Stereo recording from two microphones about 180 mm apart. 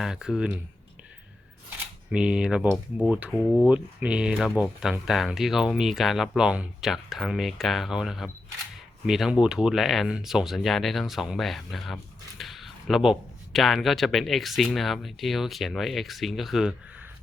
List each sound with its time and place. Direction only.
0.0 s speech: 5° right (ahead or behind)
2.1 s speech: 5° right (ahead or behind)
3.7 s speech: 5° right (ahead or behind)